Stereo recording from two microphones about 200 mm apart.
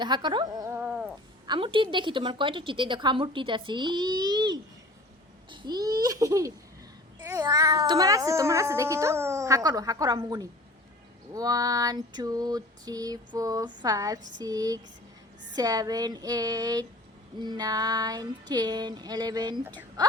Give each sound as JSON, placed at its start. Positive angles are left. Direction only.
{"t": 0.0, "sound": "a sound", "side_deg": -20}
{"t": 1.5, "sound": "a woman's voice", "side_deg": -25}
{"t": 5.5, "sound": "babbling", "side_deg": -20}
{"t": 7.2, "sound": "a woman's voice", "side_deg": -15}